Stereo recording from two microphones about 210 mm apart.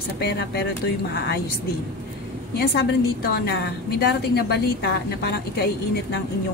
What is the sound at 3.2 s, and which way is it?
A woman's voice, 50° left (ahead or behind).